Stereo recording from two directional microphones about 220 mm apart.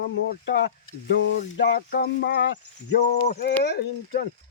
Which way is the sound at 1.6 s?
45° left (ahead or behind).